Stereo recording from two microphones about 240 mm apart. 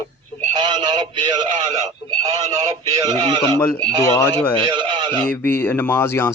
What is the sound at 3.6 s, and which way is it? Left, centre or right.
Speech, centre.